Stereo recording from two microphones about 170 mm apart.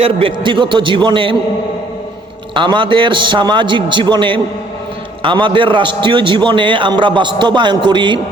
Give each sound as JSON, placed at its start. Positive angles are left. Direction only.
{"t": 0.0, "sound": "a man's voice", "side_deg": -30}
{"t": 2.6, "sound": "a man's voice", "side_deg": -25}